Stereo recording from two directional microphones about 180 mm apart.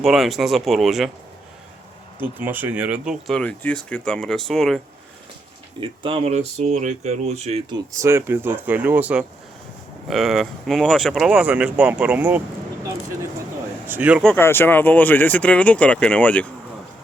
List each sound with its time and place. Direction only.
0.0 s speech: centre (ahead or behind)
2.4 s speech: 10° right (ahead or behind)
5.8 s speech: 30° right (ahead or behind)
7.7 s speech: 15° right (ahead or behind)
13.8 s speech: 10° right (ahead or behind)
14.2 s speech: 10° left (ahead or behind)